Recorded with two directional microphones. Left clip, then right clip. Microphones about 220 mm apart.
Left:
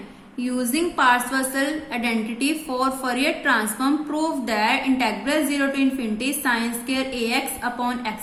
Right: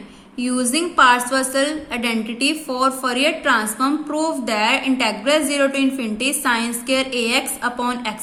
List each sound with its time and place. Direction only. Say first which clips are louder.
0.3 s a woman's voice: right 3 dB; 25° right (ahead or behind)